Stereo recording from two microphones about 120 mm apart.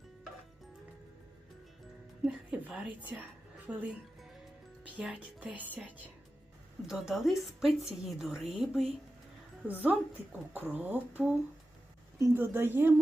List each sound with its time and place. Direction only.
2.2 s speech: 10° right (ahead or behind)
4.9 s speech: 10° right (ahead or behind)
6.8 s a woman's voice: centre (ahead or behind)
9.6 s speech: 15° right (ahead or behind)